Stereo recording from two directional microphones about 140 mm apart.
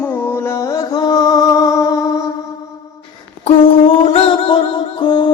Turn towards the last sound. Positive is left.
turn(degrees=35)  # may be behind; listen again after turning